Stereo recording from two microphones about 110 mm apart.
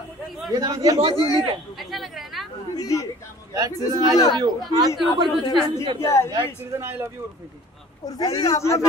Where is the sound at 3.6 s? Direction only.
30° right (ahead or behind).